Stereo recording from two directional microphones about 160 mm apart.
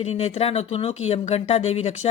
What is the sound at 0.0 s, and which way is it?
Speech, 40° left (ahead or behind).